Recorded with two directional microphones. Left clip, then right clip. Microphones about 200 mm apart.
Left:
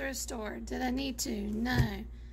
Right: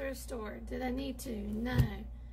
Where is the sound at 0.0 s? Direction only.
45° left (ahead or behind).